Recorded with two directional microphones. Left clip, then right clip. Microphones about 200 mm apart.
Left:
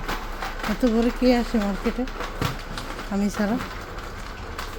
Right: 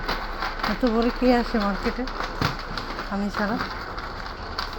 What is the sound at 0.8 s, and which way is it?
Speech, 30° left (ahead or behind).